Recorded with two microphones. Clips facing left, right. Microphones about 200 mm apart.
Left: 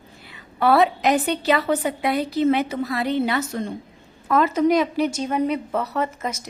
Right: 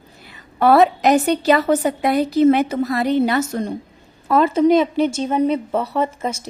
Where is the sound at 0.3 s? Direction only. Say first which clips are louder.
Right 4 dB; 45° right (ahead or behind).